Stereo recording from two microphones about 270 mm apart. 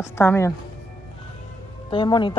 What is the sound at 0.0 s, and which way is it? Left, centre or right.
Speech, centre.